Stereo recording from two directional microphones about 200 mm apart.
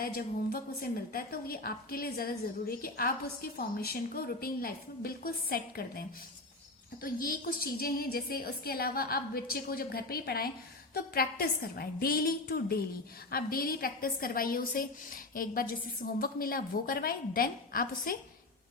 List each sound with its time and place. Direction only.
0.0 s a woman's voice: 45° left (ahead or behind)